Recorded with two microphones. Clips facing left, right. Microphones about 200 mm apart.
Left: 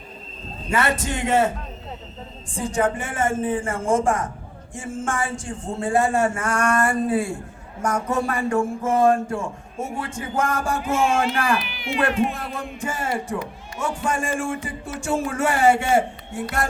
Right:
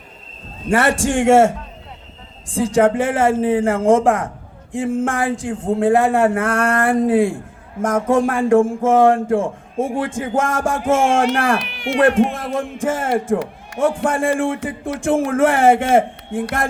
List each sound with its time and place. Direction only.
0.7 s speech: 75° right (ahead or behind); by 4.3 s 60° right (ahead or behind)
4.7 s speech: 75° right (ahead or behind); by 7.3 s 90° right
7.3 s speech: 50° right (ahead or behind)
8.1 s speech: 90° right
9.3 s speech: 50° right (ahead or behind)
10.0 s speech: 90° right
10.8 s speech: 50° right (ahead or behind)
11.1 s speech: 90° right
13.1 s speech: 50° right (ahead or behind)